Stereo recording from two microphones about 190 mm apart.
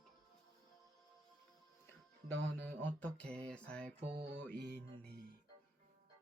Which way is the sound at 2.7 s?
10° left (ahead or behind).